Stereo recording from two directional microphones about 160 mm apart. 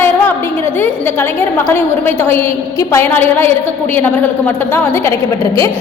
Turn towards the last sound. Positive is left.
turn(degrees=10)  # may be behind; listen again after turning